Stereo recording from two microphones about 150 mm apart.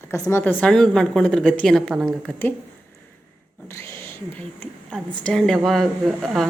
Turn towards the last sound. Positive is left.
turn(degrees=0)  # may be behind; listen again after turning